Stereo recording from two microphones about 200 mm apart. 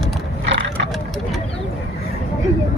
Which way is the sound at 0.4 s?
65° right (ahead or behind).